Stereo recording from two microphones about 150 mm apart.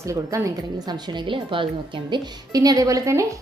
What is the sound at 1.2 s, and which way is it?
A woman's voice, 35° right (ahead or behind).